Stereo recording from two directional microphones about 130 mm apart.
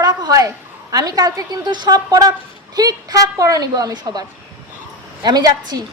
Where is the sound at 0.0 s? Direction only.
30° right (ahead or behind).